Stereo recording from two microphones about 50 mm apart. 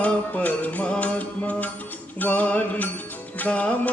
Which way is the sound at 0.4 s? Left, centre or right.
Left.